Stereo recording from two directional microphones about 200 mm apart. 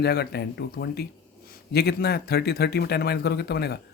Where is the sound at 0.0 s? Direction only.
55° left (ahead or behind).